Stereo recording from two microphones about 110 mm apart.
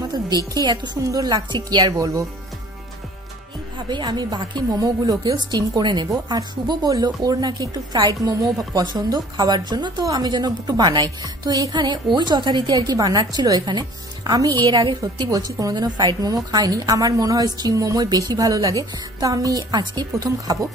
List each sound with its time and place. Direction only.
0.6 s a woman's voice: 35° right (ahead or behind)
3.9 s a woman's voice: 40° right (ahead or behind)